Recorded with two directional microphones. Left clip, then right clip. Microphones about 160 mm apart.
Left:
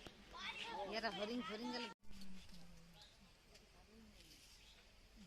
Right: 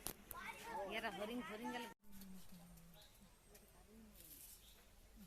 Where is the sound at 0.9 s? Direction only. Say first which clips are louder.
Left 2 dB; 70° left (ahead or behind).